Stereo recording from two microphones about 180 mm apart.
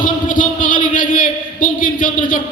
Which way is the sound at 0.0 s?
50° left (ahead or behind).